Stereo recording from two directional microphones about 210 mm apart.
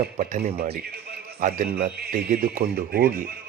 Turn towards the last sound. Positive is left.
turn(degrees=-45)  # may be behind; listen again after turning